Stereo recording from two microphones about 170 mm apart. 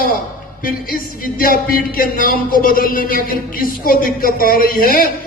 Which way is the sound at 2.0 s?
60° left (ahead or behind).